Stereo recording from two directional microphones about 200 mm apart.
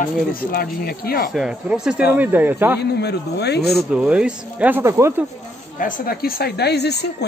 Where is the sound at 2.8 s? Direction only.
55° left (ahead or behind).